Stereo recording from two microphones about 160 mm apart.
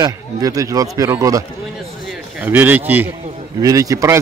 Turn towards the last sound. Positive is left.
turn(degrees=-20)  # may be behind; listen again after turning